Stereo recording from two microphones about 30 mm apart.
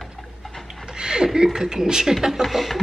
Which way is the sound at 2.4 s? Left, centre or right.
Right.